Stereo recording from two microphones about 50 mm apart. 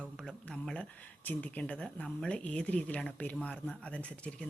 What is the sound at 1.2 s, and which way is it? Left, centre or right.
Speech, left.